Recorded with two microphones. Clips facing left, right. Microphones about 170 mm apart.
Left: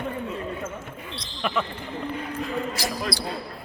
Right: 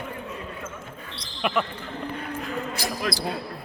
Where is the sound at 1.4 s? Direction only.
5° right (ahead or behind).